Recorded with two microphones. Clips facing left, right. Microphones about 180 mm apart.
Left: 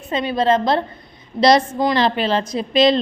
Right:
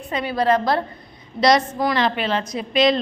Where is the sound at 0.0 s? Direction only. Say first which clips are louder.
Left 2 dB; 25° left (ahead or behind).